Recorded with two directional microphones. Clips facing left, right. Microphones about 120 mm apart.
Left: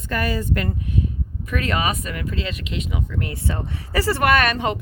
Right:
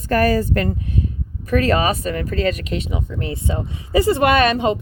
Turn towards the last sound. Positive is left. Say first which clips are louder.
# right 3 dB
turn(degrees=-20)  # may be behind; listen again after turning